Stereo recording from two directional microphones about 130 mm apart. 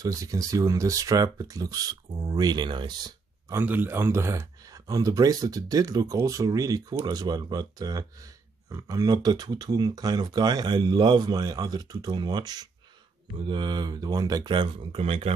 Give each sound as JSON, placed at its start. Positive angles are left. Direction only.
{"t": 0.0, "sound": "speech", "side_deg": -25}
{"t": 3.5, "sound": "speech", "side_deg": -15}